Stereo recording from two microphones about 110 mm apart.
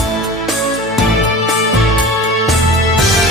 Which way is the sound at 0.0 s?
Centre (ahead or behind).